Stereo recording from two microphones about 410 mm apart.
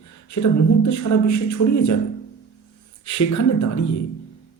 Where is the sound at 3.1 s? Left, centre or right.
Left.